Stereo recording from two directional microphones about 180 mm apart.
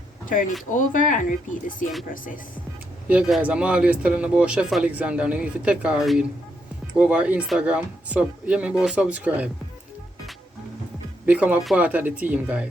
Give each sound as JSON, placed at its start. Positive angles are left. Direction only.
{"t": 0.7, "sound": "speech", "side_deg": 45}
{"t": 3.1, "sound": "speech", "side_deg": -5}
{"t": 11.3, "sound": "speech", "side_deg": -10}